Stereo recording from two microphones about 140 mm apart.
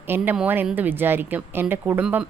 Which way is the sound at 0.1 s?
15° right (ahead or behind).